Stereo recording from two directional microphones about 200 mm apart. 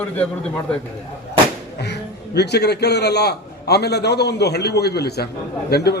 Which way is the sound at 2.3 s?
55° left (ahead or behind).